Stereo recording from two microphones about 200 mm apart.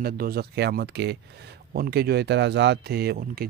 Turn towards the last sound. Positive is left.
turn(degrees=-55)  # may be behind; listen again after turning